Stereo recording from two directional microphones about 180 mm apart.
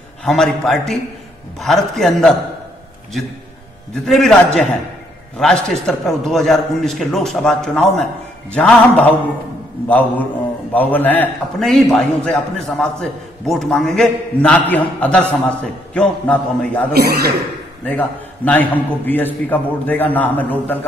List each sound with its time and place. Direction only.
0.2 s a man's voice: 5° left (ahead or behind)
4.0 s a man's voice: centre (ahead or behind)
16.9 s speech: 60° right (ahead or behind)
17.8 s a man's voice: 10° left (ahead or behind)